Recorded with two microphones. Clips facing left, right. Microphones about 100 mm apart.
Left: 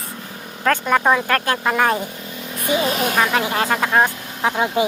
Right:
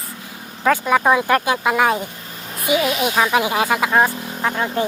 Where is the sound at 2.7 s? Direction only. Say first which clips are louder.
Right 1 dB; 35° left (ahead or behind).